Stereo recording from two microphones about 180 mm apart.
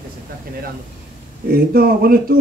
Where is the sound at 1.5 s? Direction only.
55° right (ahead or behind).